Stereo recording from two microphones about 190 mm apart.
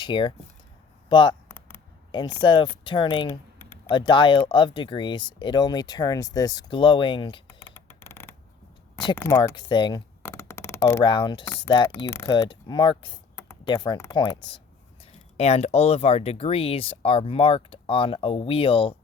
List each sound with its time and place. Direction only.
0.0 s speech: 25° left (ahead or behind)
1.5 s a sound: 10° left (ahead or behind)
2.1 s speech: 25° left (ahead or behind)
7.4 s a sound: 10° left (ahead or behind)
9.1 s speech: 15° left (ahead or behind)
9.6 s speech: 25° left (ahead or behind)
10.2 s a sound: 15° left (ahead or behind)
11.0 s speech: 25° left (ahead or behind)
11.4 s speech: 10° left (ahead or behind)
11.7 s speech: 25° left (ahead or behind)